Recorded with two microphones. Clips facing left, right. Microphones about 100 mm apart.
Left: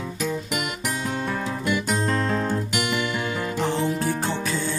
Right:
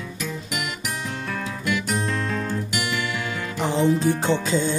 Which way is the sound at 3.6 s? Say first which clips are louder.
Right 5 dB; 20° right (ahead or behind).